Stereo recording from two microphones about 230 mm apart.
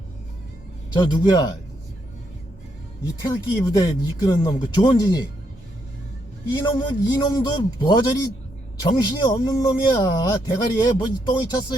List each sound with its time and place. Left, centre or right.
0.9 s a man's voice: centre
3.2 s speech: centre
6.6 s a man's voice: centre